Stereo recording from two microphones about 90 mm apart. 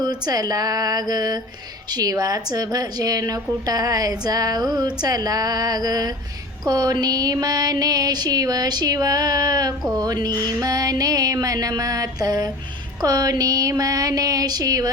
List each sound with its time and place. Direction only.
0.0 s a woman's voice: 45° right (ahead or behind)